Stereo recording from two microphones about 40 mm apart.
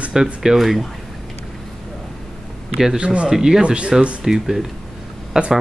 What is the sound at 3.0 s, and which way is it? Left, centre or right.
Speech, right.